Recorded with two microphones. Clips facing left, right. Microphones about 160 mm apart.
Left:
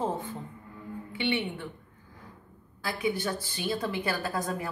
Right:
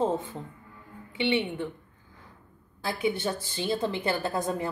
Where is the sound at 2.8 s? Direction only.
25° right (ahead or behind).